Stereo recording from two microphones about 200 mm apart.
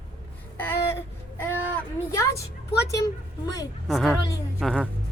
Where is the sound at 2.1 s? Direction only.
15° left (ahead or behind).